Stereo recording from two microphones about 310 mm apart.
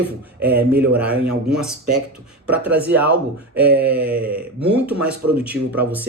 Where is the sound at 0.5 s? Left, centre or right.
Right.